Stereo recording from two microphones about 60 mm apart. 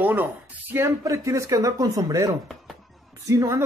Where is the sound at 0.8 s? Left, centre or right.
Right.